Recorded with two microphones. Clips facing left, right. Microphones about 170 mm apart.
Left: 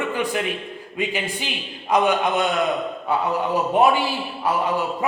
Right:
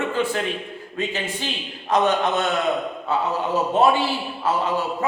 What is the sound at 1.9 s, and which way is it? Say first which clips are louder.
Speech: even; 10° left (ahead or behind).